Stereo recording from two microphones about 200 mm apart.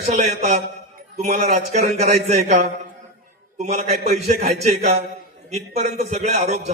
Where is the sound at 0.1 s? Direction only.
35° right (ahead or behind).